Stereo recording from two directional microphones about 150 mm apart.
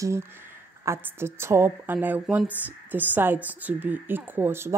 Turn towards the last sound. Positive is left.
turn(degrees=-15)  # may be behind; listen again after turning